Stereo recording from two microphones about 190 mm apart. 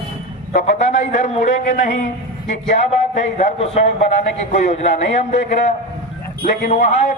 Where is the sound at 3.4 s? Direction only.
35° left (ahead or behind).